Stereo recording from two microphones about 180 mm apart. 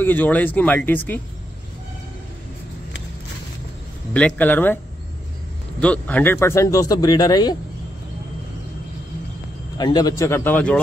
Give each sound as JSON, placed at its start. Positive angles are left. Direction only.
{"t": 0.0, "sound": "speech", "side_deg": 10}
{"t": 4.1, "sound": "speech", "side_deg": 10}
{"t": 5.8, "sound": "speech", "side_deg": 10}
{"t": 9.8, "sound": "speech", "side_deg": 20}